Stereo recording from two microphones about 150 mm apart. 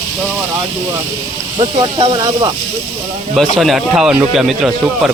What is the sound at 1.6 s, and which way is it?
Speech, 40° right (ahead or behind).